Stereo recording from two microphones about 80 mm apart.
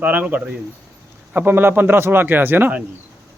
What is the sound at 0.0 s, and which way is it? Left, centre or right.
Speech, right.